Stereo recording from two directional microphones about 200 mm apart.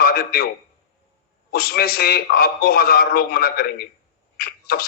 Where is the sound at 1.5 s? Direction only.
50° left (ahead or behind).